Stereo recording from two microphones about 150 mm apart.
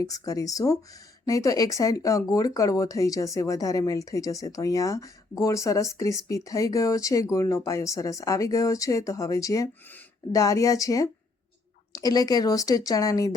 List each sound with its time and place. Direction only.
0.0 s speech: 25° left (ahead or behind)